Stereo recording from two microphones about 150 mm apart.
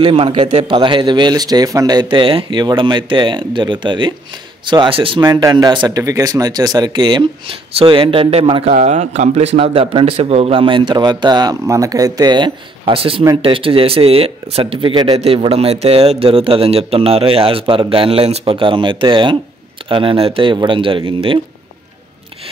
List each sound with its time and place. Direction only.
0.0 s a man's voice: 35° right (ahead or behind)
5.2 s speech: 25° right (ahead or behind)
8.6 s a man's voice: 50° right (ahead or behind)